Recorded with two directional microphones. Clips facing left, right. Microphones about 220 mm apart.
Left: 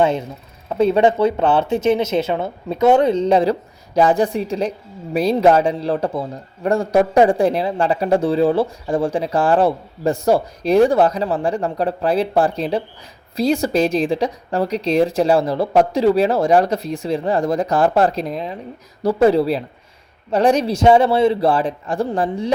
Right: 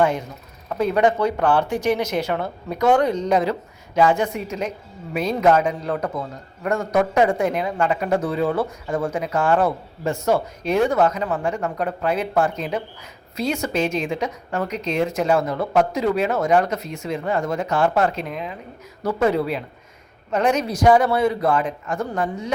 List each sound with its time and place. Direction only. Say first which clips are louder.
0.0 s a man's voice: left 3 dB; 25° left (ahead or behind)